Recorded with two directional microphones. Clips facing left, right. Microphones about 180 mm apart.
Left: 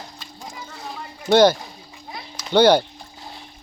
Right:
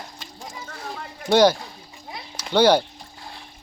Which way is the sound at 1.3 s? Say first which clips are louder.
Left 2 dB; 10° right (ahead or behind).